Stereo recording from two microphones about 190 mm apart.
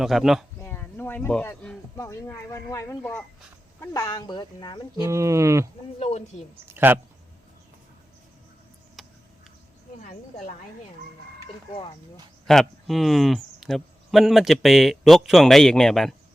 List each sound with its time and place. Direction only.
0.0 s speech: centre (ahead or behind)
0.6 s a sound: 10° left (ahead or behind)
2.0 s speech: 15° left (ahead or behind)
4.9 s speech: 15° right (ahead or behind)
6.0 s speech: 35° left (ahead or behind)
6.7 s speech: 10° right (ahead or behind)
9.0 s a sound: centre (ahead or behind)
10.0 s speech: 40° left (ahead or behind)
12.5 s speech: centre (ahead or behind)